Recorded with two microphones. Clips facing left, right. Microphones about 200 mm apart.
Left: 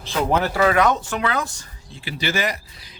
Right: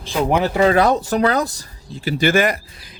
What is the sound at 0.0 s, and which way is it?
Speech, 15° right (ahead or behind).